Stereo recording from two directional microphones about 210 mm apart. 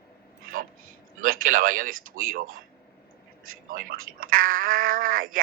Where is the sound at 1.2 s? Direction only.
40° right (ahead or behind).